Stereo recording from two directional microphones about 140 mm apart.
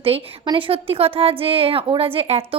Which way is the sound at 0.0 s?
40° right (ahead or behind).